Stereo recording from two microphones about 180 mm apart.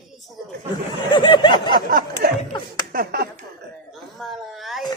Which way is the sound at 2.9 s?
55° right (ahead or behind).